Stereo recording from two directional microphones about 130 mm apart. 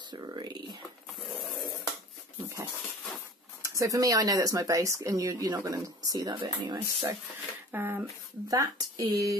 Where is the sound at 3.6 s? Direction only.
25° right (ahead or behind).